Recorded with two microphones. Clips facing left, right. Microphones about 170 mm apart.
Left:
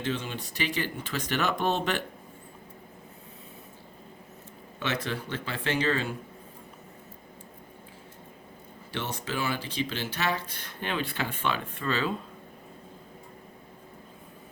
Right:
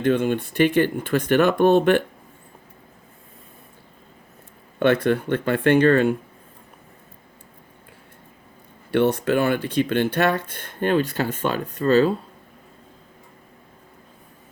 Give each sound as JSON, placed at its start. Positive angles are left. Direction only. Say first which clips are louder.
{"t": 0.0, "sound": "speech", "louder": "right 12 dB", "side_deg": -55}
{"t": 4.8, "sound": "speech", "louder": "right 13 dB", "side_deg": -55}
{"t": 8.9, "sound": "speech", "louder": "right 15 dB", "side_deg": -60}